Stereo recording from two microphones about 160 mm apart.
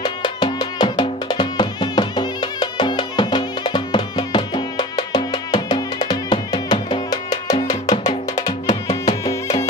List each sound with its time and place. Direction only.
0.0 s music: 30° left (ahead or behind)